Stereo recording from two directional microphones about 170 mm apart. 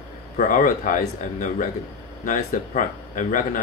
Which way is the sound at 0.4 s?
50° left (ahead or behind).